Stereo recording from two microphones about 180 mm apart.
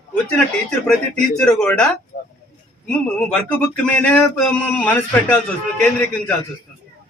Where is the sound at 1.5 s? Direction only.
5° left (ahead or behind).